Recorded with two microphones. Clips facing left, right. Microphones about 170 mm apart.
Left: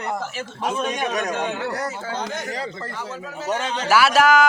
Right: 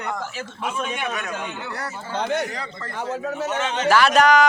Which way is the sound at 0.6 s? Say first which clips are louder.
Left 3 dB; 40° left (ahead or behind).